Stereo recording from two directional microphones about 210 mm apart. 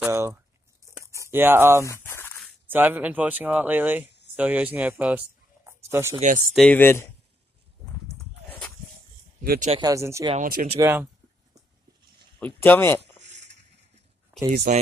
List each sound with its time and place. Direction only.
0.0 s a sound: 15° right (ahead or behind)
1.9 s a sound: 10° left (ahead or behind)
2.7 s speech: 10° right (ahead or behind)
6.1 s speech: 35° right (ahead or behind)
6.5 s speech: 5° left (ahead or behind)
9.4 s speech: 45° right (ahead or behind)
9.7 s speech: 20° right (ahead or behind)
10.3 s speech: 40° right (ahead or behind)
10.8 s speech: 10° right (ahead or behind)
12.4 s speech: 10° left (ahead or behind)
14.5 s speech: 45° right (ahead or behind)